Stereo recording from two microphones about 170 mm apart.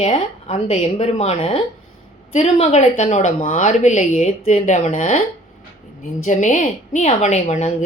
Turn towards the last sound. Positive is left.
turn(degrees=45)  # may be behind; listen again after turning